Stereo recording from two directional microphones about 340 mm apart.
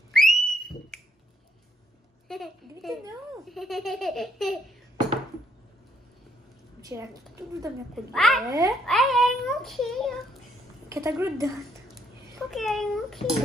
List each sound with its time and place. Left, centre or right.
0.1 s whistle: centre
2.2 s a child's voice: centre
6.8 s a woman's voice: centre